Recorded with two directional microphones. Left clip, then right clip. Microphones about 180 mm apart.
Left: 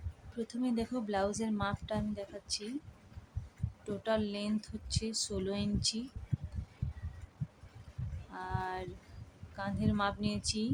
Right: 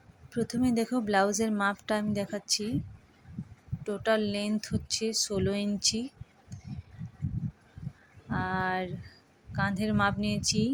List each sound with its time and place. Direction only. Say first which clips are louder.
0.3 s a woman's voice: right 7 dB; 25° right (ahead or behind)
3.8 s a woman's voice: right 6 dB; 25° right (ahead or behind)
8.3 s a sound: right 9 dB; 25° right (ahead or behind)
9.6 s a woman's voice: right 7 dB; 25° right (ahead or behind)